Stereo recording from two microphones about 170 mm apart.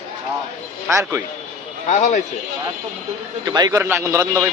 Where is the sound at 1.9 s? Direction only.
45° left (ahead or behind).